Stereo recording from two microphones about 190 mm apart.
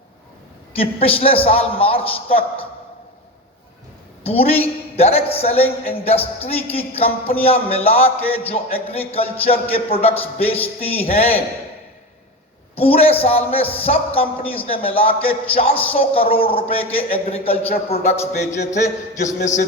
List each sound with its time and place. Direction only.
0.8 s a man's voice: 30° left (ahead or behind)
4.2 s a woman's voice: 30° left (ahead or behind)
12.7 s a man's voice: 30° left (ahead or behind)